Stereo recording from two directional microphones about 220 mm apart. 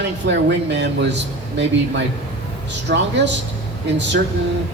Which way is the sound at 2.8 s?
55° right (ahead or behind).